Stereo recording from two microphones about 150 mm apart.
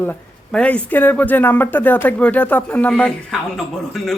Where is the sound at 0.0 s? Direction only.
10° left (ahead or behind).